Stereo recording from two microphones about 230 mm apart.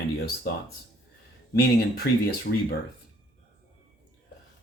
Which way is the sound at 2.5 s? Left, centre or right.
Left.